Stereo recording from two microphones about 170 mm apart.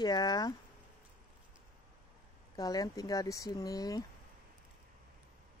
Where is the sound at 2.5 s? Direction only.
20° left (ahead or behind).